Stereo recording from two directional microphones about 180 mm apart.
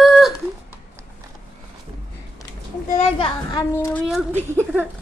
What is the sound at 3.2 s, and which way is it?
Speech, 25° left (ahead or behind).